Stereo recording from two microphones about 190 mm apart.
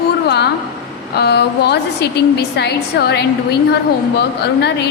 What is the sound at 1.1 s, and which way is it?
A woman's voice, 60° left (ahead or behind).